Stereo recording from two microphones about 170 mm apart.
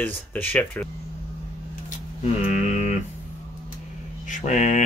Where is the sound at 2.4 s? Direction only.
45° left (ahead or behind).